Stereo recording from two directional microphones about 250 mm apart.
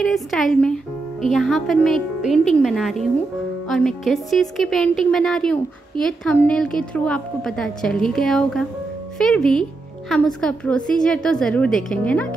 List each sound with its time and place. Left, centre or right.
0.0 s speech: centre